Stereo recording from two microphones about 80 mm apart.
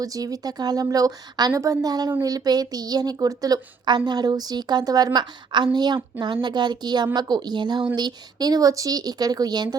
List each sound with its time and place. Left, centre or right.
0.0 s a woman's voice: right
3.8 s speech: right